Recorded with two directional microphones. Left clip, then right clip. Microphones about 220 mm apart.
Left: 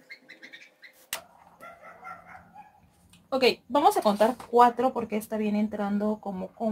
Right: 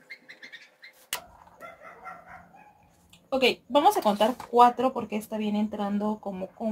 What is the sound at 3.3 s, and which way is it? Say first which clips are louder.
A woman's voice: right 1 dB; 20° left (ahead or behind).